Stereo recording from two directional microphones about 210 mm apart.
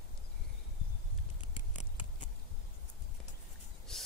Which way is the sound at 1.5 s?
35° left (ahead or behind).